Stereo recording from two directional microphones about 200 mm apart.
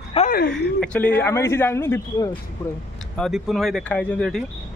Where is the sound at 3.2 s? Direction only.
Centre (ahead or behind).